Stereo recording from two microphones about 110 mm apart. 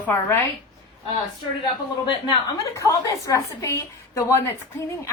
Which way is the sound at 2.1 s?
40° left (ahead or behind).